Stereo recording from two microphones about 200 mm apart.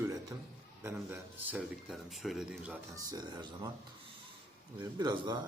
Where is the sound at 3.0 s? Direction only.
20° right (ahead or behind).